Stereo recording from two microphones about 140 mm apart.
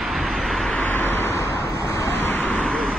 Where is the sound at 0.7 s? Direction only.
15° left (ahead or behind).